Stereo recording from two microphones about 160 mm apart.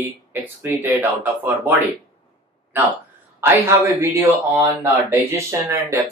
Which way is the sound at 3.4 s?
15° right (ahead or behind).